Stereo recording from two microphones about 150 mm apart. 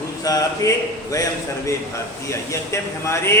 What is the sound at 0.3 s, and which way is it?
A man's voice, 25° left (ahead or behind).